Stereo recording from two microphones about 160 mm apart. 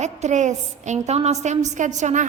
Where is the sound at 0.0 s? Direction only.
45° right (ahead or behind).